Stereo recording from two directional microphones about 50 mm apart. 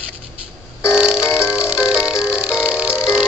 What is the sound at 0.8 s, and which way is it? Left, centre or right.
Music, centre.